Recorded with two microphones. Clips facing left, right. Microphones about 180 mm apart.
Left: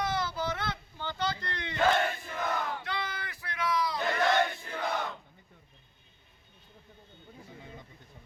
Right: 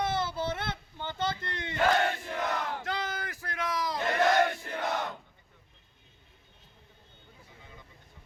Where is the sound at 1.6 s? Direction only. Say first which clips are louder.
Right 1 dB; 65° right (ahead or behind).